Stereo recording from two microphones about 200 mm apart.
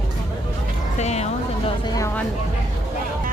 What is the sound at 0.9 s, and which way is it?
Speech, 35° left (ahead or behind).